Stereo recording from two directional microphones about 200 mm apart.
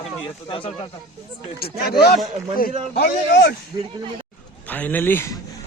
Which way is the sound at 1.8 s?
50° left (ahead or behind).